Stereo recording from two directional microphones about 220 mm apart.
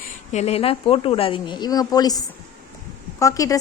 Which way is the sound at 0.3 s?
30° left (ahead or behind).